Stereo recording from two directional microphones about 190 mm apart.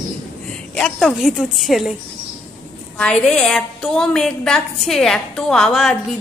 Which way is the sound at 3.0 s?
5° left (ahead or behind).